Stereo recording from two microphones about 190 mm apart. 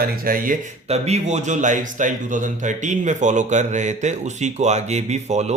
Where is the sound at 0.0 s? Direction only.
50° right (ahead or behind).